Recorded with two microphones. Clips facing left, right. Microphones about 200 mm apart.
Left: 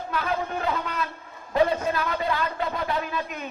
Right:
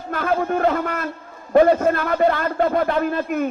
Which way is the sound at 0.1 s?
50° right (ahead or behind).